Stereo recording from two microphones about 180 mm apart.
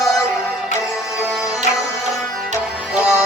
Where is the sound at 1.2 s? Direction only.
5° right (ahead or behind).